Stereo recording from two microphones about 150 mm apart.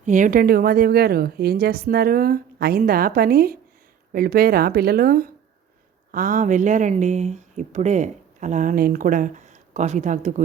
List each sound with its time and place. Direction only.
0.0 s a woman's voice: 60° right (ahead or behind); by 5.3 s 75° right (ahead or behind)
6.1 s speech: 65° right (ahead or behind)